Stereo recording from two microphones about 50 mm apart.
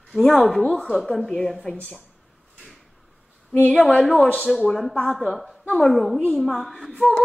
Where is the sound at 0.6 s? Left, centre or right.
Centre.